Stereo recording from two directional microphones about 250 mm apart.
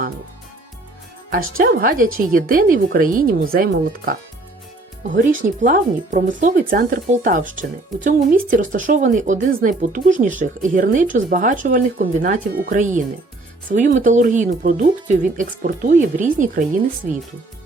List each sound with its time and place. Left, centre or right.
1.3 s speech: right
17.0 s speech: centre